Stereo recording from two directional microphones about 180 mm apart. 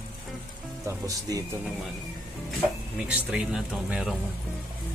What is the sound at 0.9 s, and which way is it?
Speech, 20° right (ahead or behind).